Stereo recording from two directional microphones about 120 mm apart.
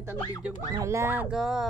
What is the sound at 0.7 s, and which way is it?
Speech, 25° right (ahead or behind).